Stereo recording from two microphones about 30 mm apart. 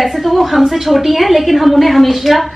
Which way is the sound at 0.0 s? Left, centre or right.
Centre.